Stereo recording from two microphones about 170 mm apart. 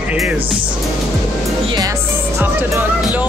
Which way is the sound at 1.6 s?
20° right (ahead or behind).